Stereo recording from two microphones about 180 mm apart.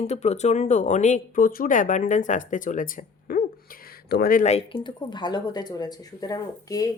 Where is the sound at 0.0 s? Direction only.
35° left (ahead or behind).